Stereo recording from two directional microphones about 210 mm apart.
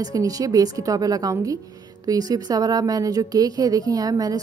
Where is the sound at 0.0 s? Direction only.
15° right (ahead or behind).